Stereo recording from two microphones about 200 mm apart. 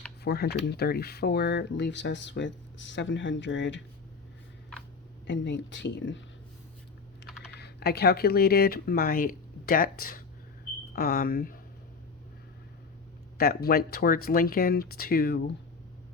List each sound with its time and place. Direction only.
0.3 s speech: 55° left (ahead or behind)
5.2 s speech: 65° left (ahead or behind)
7.6 s speech: 50° left (ahead or behind)
13.4 s speech: 50° left (ahead or behind)